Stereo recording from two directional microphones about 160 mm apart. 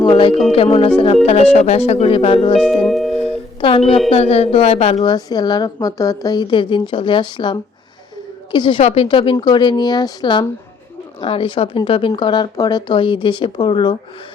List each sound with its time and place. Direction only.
0.0 s speech: 30° left (ahead or behind)
2.8 s music: centre (ahead or behind)
3.1 s music: 35° left (ahead or behind)
4.1 s speech: 40° left (ahead or behind)
5.0 s a woman's voice: 25° left (ahead or behind)